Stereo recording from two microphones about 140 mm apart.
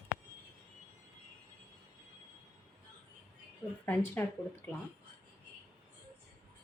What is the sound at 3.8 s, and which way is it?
Speech, 15° left (ahead or behind).